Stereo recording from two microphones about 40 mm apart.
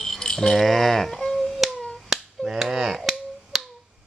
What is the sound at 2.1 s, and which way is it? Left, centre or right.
Finger snapping, centre.